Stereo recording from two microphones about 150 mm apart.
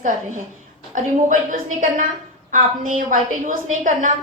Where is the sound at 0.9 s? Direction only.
60° right (ahead or behind).